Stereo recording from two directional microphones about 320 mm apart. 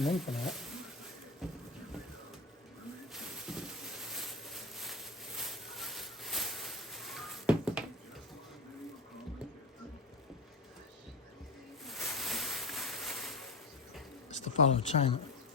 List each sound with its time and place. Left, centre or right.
0.0 s speech: centre
3.2 s a sound: centre
11.9 s boat: centre
14.3 s speech: left